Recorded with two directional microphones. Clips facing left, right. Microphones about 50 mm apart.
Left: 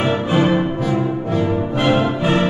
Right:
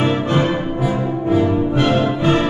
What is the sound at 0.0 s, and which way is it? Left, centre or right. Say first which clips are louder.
Music: even; centre.